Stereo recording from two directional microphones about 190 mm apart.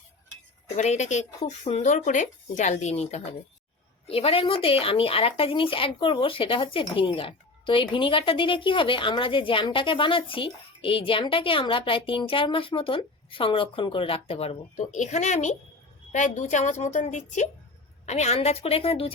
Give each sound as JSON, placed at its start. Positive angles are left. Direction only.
{"t": 0.8, "sound": "speech", "side_deg": 40}